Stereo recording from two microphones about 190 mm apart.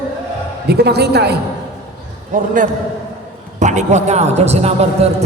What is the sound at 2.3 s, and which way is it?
Speech, 45° right (ahead or behind).